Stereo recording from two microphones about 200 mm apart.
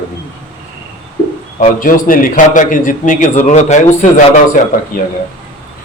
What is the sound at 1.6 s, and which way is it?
A man's voice, 45° left (ahead or behind).